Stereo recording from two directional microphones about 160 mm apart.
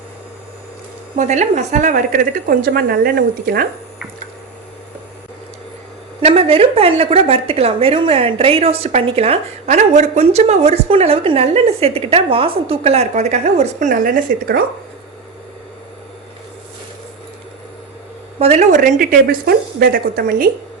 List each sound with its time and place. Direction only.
1.2 s a woman's voice: 45° right (ahead or behind); by 3.7 s 70° right (ahead or behind)
6.2 s a woman's voice: 35° right (ahead or behind); by 14.6 s 65° right (ahead or behind)
18.3 s a woman's voice: 40° right (ahead or behind); by 20.5 s 65° right (ahead or behind)